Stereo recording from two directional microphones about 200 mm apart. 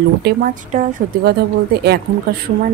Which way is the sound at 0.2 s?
55° right (ahead or behind).